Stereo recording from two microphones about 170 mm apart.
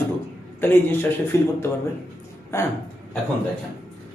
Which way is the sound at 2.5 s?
15° left (ahead or behind).